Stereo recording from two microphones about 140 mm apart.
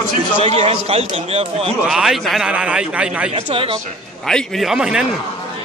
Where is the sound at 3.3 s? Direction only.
40° right (ahead or behind).